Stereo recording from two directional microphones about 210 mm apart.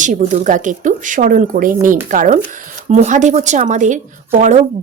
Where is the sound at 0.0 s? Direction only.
35° right (ahead or behind).